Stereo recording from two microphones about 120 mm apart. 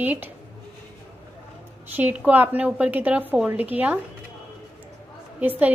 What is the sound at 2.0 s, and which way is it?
A woman's voice, 15° right (ahead or behind).